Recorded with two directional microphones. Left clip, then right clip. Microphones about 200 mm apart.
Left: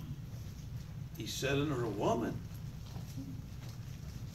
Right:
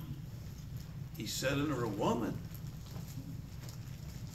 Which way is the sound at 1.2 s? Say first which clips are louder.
Right 1 dB; 15° right (ahead or behind).